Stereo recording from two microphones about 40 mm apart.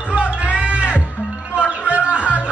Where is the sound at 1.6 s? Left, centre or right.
Right.